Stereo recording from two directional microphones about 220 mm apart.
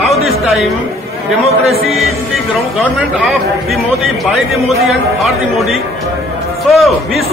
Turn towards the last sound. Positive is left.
turn(degrees=0)  # may be behind; listen again after turning